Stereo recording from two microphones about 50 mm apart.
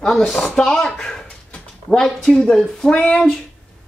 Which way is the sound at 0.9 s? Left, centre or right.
Centre.